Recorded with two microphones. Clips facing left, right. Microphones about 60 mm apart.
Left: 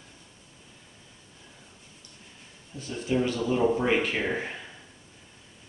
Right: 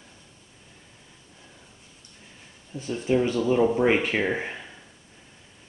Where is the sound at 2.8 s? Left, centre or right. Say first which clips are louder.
Right 4 dB; right.